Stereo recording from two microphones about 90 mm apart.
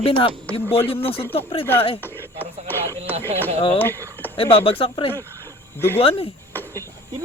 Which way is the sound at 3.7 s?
25° left (ahead or behind).